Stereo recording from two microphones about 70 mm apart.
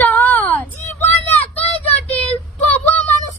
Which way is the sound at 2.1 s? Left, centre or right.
Left.